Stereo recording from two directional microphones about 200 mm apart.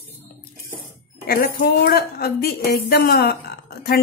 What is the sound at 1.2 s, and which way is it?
A woman's voice, 50° left (ahead or behind).